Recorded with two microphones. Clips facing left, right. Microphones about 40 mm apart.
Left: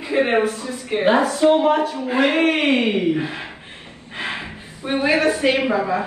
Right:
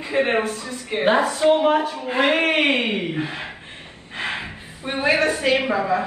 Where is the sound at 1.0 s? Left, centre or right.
Centre.